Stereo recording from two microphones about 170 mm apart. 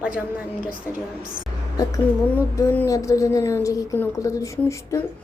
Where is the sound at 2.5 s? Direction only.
15° left (ahead or behind).